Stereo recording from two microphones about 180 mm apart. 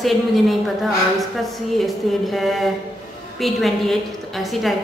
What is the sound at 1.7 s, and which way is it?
A woman's voice, centre (ahead or behind).